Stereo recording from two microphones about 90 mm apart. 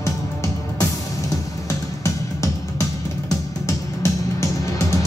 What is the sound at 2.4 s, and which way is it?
Music, 35° left (ahead or behind).